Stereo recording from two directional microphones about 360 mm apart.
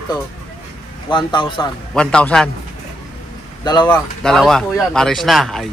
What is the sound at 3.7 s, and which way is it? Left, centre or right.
Speech, centre.